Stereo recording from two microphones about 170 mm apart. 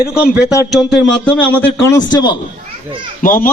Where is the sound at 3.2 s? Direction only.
55° left (ahead or behind).